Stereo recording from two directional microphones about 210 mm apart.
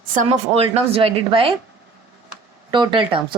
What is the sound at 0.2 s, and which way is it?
Speech, 30° right (ahead or behind).